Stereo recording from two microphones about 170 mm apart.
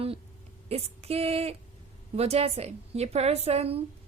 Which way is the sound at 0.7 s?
35° right (ahead or behind).